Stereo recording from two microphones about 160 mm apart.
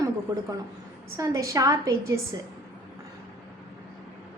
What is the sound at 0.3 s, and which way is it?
A woman's voice, 20° right (ahead or behind).